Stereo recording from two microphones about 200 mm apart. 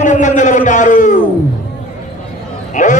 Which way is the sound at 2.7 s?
40° left (ahead or behind).